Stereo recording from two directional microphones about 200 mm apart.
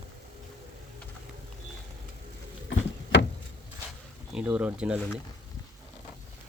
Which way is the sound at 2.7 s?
65° left (ahead or behind).